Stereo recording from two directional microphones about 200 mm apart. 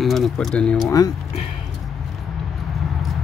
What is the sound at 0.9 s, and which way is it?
Speech, 15° left (ahead or behind).